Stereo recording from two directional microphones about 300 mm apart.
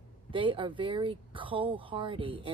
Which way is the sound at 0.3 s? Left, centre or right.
Centre.